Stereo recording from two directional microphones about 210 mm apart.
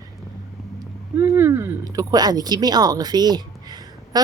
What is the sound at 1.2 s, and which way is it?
A woman's voice, 10° right (ahead or behind).